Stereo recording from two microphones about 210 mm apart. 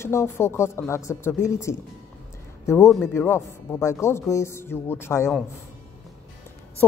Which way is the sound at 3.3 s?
15° left (ahead or behind).